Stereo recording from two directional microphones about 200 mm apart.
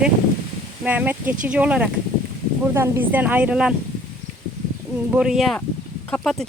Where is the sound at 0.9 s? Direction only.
10° right (ahead or behind).